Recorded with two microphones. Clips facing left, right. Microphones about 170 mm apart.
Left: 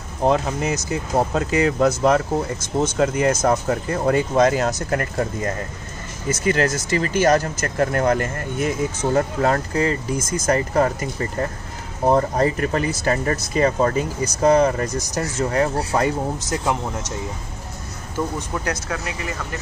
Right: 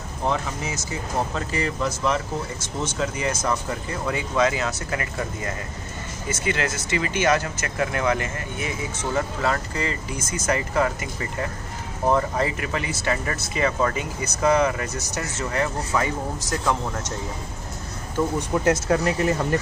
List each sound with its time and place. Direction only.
0.2 s speech: 40° left (ahead or behind)
1.8 s speech: 45° left (ahead or behind)
18.5 s speech: 25° right (ahead or behind)